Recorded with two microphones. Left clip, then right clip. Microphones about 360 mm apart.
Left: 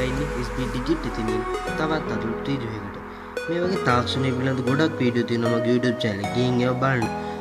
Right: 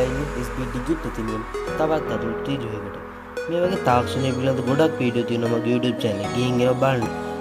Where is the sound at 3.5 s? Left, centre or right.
Centre.